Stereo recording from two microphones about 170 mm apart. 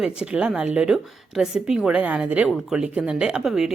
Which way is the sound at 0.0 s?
5° right (ahead or behind).